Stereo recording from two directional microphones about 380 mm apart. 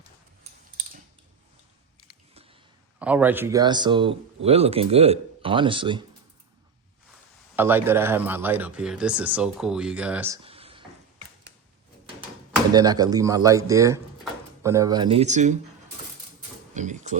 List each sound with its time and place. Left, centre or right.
2.3 s a sound: centre
3.0 s speech: centre
7.5 s a man's voice: centre
12.7 s speech: centre
16.7 s speech: centre